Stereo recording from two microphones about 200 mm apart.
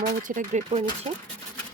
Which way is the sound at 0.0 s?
40° right (ahead or behind).